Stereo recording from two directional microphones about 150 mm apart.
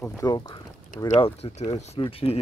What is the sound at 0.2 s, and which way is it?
Speech, 25° left (ahead or behind).